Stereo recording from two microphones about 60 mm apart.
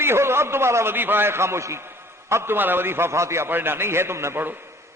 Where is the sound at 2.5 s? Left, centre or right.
Right.